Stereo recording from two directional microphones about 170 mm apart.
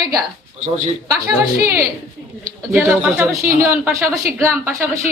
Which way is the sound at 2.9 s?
10° right (ahead or behind).